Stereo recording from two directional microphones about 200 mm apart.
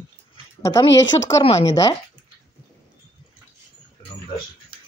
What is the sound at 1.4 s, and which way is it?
Speech, 30° left (ahead or behind).